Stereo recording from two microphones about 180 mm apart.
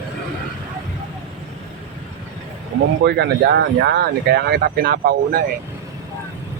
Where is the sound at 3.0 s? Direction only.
70° right (ahead or behind).